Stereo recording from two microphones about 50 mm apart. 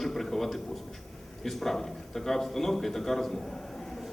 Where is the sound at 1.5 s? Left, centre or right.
Centre.